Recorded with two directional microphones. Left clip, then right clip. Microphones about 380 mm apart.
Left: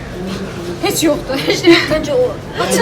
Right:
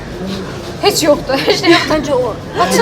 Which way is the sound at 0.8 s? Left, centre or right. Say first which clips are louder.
Right 4 dB; right.